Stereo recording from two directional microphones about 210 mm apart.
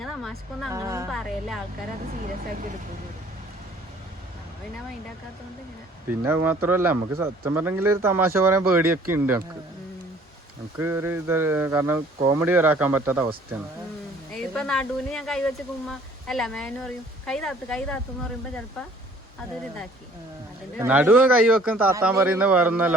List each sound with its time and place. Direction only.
0.0 s a sound: centre (ahead or behind)
0.7 s speech: 15° right (ahead or behind)
1.1 s speech: centre (ahead or behind)
2.2 s speech: 40° right (ahead or behind)
6.1 s speech: 10° right (ahead or behind)
10.8 s speech: 10° right (ahead or behind)
14.3 s speech: 5° left (ahead or behind)
20.8 s speech: 10° right (ahead or behind)